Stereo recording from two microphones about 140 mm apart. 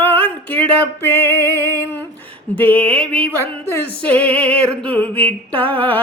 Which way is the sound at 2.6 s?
10° left (ahead or behind).